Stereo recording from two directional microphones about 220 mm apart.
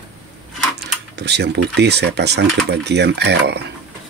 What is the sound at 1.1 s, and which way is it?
Speech, 50° right (ahead or behind).